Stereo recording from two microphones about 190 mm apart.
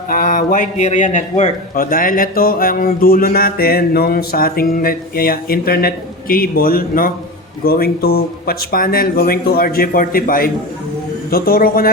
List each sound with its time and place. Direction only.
0.1 s a man's voice: 45° left (ahead or behind)